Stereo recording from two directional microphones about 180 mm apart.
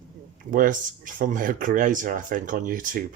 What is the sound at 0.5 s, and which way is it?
Speech, 50° right (ahead or behind).